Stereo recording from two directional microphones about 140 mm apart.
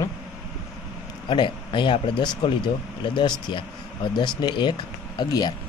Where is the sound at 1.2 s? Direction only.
35° left (ahead or behind).